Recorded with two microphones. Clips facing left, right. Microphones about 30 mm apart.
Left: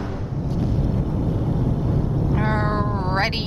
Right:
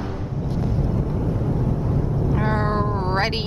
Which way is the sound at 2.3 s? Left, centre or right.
Centre.